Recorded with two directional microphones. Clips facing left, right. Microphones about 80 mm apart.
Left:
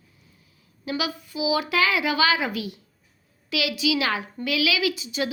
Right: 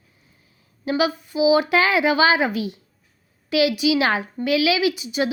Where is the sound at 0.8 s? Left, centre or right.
Right.